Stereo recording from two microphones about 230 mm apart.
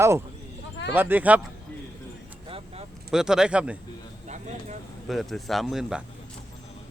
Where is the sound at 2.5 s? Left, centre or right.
Right.